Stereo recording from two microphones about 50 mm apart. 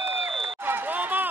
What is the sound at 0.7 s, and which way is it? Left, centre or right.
Run, right.